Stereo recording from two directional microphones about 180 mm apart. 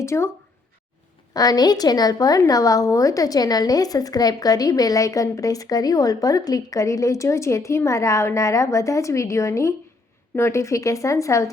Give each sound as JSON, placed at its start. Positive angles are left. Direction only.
{"t": 0.0, "sound": "speech", "side_deg": 15}
{"t": 1.3, "sound": "a woman's voice", "side_deg": 20}